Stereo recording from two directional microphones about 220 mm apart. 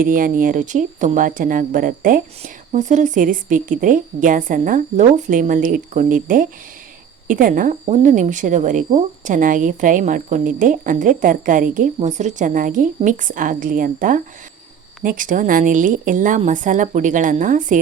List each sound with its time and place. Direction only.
0.0 s speech: 40° right (ahead or behind)